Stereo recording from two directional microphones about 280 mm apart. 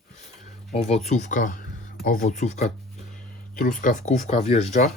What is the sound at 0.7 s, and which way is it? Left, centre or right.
Speech, left.